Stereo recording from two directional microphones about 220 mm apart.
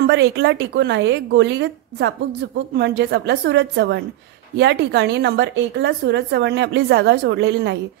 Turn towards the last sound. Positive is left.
turn(degrees=-50)  # may be behind; listen again after turning